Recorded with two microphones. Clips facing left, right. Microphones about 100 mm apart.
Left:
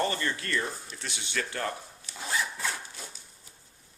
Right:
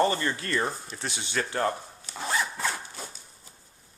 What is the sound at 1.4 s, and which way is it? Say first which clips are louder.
Zipper: right 6 dB; 30° right (ahead or behind).